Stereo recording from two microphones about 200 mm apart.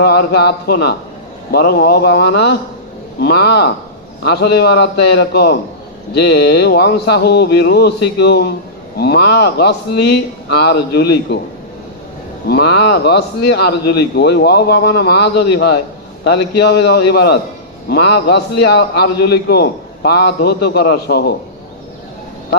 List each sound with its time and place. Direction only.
0.0 s a man's voice: 55° left (ahead or behind)
12.5 s a man's voice: 55° left (ahead or behind)